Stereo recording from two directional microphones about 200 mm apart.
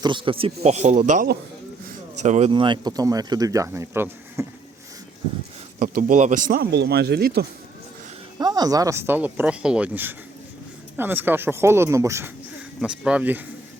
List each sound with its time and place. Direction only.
0.0 s speech: 25° right (ahead or behind)
5.8 s speech: 40° right (ahead or behind)
6.7 s speech: 55° right (ahead or behind)
8.4 s speech: 20° right (ahead or behind)